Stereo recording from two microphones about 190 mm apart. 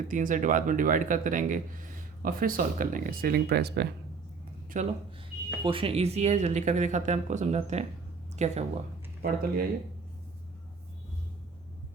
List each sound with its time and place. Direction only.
0.1 s a man's voice: 45° right (ahead or behind); by 3.8 s 60° right (ahead or behind)
4.7 s speech: 40° right (ahead or behind)
5.6 s speech: 30° right (ahead or behind)
9.2 s a man's voice: 50° right (ahead or behind)